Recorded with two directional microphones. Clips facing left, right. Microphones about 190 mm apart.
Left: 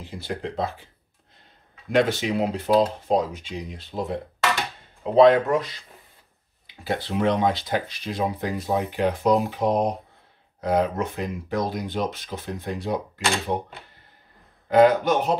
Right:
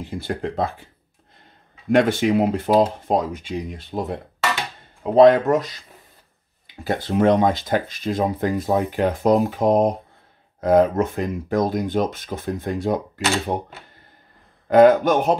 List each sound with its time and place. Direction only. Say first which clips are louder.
0.0 s speech: right 5 dB; 50° right (ahead or behind)
1.9 s speech: right 4 dB; 55° right (ahead or behind)
6.8 s speech: right 5 dB; 45° right (ahead or behind)
14.7 s speech: right 4 dB; 50° right (ahead or behind)